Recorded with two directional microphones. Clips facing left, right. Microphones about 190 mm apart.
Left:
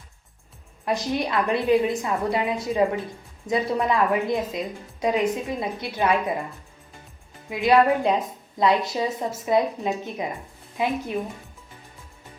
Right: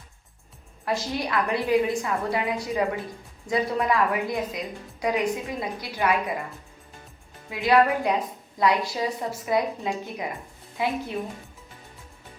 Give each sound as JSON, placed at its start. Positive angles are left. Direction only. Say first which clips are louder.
{"t": 0.9, "sound": "a woman's voice", "louder": "left 3 dB", "side_deg": 20}
{"t": 7.5, "sound": "a woman's voice", "louder": "left 2 dB", "side_deg": 20}